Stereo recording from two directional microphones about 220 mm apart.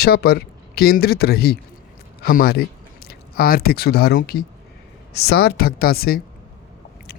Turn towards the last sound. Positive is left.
turn(degrees=45)  # may be behind; listen again after turning